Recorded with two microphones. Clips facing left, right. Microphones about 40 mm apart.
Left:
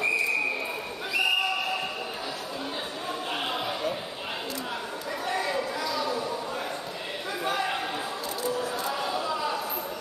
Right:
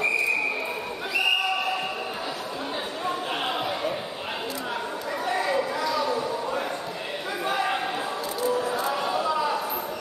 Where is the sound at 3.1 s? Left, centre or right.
Centre.